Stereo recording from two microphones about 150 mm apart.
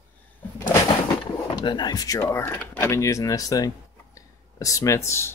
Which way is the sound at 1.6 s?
30° left (ahead or behind).